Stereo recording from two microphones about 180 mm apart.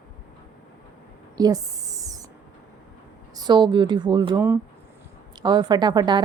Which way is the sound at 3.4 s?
25° right (ahead or behind).